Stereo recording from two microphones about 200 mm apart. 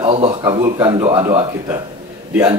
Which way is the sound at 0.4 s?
15° right (ahead or behind).